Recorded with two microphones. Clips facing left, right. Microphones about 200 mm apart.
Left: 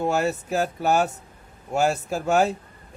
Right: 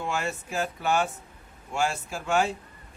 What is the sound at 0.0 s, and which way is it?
Speech, 40° left (ahead or behind).